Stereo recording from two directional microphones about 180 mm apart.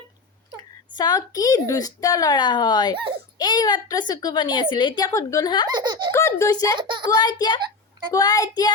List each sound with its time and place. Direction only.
0.9 s speech: 20° left (ahead or behind)
5.7 s speech: 25° right (ahead or behind)
6.1 s a child's voice: 15° left (ahead or behind)
6.7 s speech: 25° right (ahead or behind)
7.2 s speech: 20° left (ahead or behind)